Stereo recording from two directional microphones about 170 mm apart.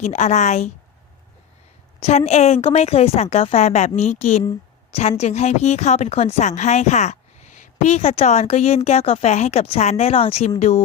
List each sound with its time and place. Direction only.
0.0 s speech: 40° left (ahead or behind)
2.0 s speech: 40° left (ahead or behind)